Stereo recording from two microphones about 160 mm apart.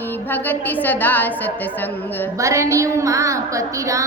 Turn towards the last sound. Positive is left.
turn(degrees=-20)  # may be behind; listen again after turning